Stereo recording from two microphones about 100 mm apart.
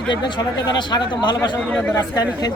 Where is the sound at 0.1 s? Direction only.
50° left (ahead or behind).